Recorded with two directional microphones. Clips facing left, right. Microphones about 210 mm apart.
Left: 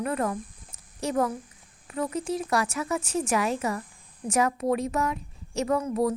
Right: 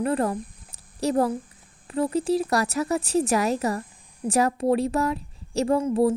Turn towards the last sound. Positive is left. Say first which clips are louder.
# right 4 dB
turn(degrees=-30)  # may be behind; listen again after turning